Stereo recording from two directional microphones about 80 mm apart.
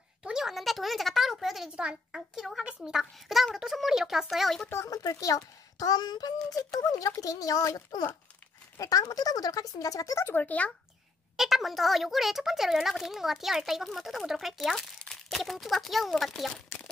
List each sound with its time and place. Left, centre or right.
0.2 s speech: centre
4.8 s a child's voice: left
10.2 s speech: left
11.3 s speech: centre